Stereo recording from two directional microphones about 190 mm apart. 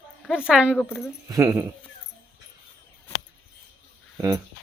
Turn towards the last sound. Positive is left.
turn(degrees=-20)  # may be behind; listen again after turning